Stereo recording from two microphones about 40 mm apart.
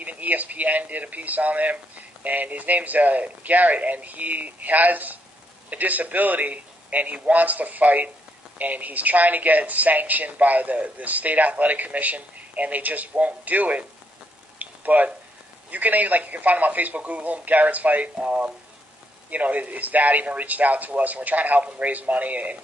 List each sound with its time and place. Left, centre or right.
0.0 s speech: right
14.6 s frying: right
15.7 s speech: right